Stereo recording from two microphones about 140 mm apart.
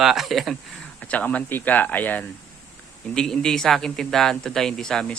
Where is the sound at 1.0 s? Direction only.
10° left (ahead or behind).